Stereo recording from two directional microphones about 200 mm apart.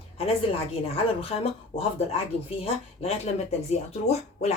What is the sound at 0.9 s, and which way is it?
Speech, 30° left (ahead or behind).